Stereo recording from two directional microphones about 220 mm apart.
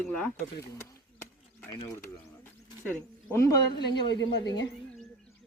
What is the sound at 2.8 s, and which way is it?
Speech, 10° left (ahead or behind).